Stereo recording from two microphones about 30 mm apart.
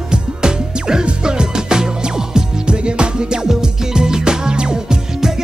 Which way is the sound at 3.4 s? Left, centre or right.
Right.